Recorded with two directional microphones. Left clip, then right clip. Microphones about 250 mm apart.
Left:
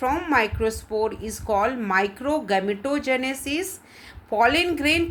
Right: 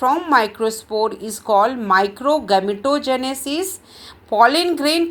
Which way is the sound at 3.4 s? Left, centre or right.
Centre.